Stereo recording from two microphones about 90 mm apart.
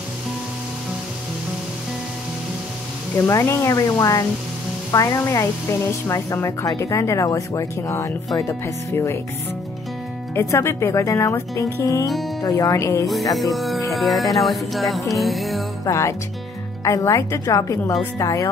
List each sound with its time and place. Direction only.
3.3 s speech: 30° left (ahead or behind)
10.3 s speech: 30° left (ahead or behind)
12.1 s speech: centre (ahead or behind)
12.4 s speech: 40° left (ahead or behind)
13.0 s music: centre (ahead or behind)
15.8 s speech: 35° left (ahead or behind)